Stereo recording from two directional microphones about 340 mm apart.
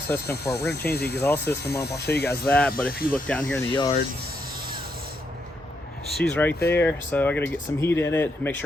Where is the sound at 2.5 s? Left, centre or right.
Centre.